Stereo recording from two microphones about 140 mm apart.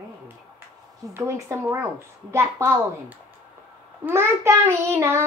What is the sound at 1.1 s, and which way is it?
Child singing, 20° right (ahead or behind).